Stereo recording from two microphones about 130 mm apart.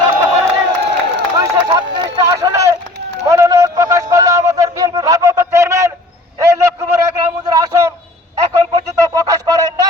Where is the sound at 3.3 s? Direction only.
25° right (ahead or behind).